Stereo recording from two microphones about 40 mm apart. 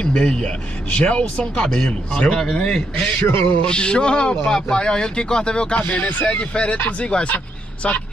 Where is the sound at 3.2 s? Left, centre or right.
Left.